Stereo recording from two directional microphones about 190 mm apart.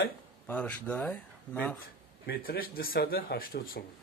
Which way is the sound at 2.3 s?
50° left (ahead or behind).